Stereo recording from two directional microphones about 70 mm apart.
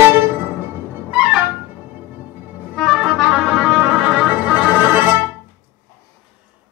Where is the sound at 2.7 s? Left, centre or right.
Centre.